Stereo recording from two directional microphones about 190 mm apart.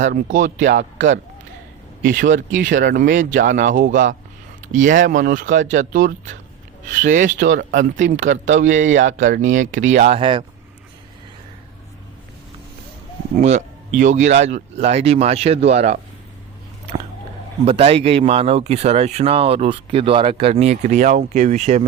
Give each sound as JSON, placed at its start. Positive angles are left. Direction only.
{"t": 0.0, "sound": "speech", "side_deg": -45}
{"t": 0.7, "sound": "speech", "side_deg": -65}
{"t": 2.0, "sound": "speech", "side_deg": -45}
{"t": 13.4, "sound": "speech", "side_deg": -35}
{"t": 17.7, "sound": "speech", "side_deg": -30}